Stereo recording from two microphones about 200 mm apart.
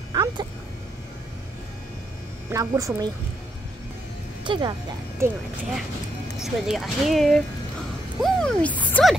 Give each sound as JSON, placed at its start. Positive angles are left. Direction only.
{"t": 0.1, "sound": "a sound", "side_deg": -20}
{"t": 2.5, "sound": "a woman's voice", "side_deg": -15}
{"t": 4.5, "sound": "a woman's voice", "side_deg": -25}
{"t": 6.4, "sound": "speech", "side_deg": 0}